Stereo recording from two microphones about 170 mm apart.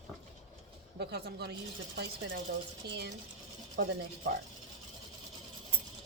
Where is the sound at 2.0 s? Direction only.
85° right.